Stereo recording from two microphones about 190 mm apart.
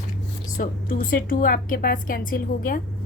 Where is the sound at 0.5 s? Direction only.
45° left (ahead or behind).